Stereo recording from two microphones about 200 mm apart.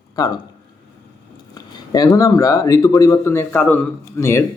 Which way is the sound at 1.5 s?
20° left (ahead or behind).